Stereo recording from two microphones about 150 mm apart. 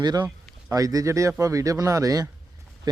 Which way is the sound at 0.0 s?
30° right (ahead or behind).